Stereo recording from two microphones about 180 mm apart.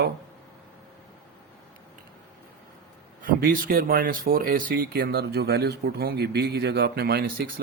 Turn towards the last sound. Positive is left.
turn(degrees=-60)  # may be behind; listen again after turning